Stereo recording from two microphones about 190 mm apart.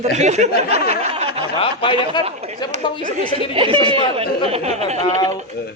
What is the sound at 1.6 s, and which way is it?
Speech, 25° left (ahead or behind).